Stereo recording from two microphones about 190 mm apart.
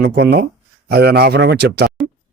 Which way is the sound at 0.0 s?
60° right (ahead or behind).